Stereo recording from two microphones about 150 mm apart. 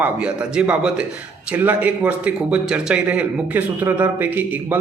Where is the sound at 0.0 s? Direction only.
10° right (ahead or behind).